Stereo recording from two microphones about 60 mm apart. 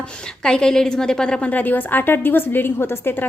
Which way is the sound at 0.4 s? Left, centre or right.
Centre.